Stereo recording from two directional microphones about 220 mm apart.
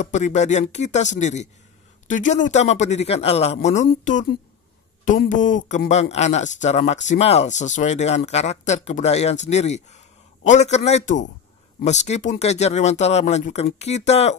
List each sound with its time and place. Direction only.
0.0 s speech: 35° left (ahead or behind)